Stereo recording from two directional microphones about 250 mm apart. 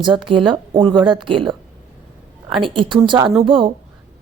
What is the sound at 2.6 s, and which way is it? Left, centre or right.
A woman's voice, centre.